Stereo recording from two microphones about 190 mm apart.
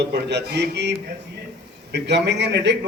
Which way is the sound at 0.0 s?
65° right (ahead or behind).